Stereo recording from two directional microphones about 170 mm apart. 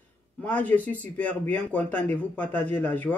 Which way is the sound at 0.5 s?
10° left (ahead or behind).